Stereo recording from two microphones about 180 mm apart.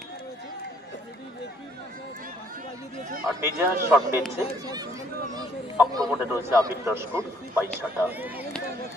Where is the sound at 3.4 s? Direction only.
15° right (ahead or behind).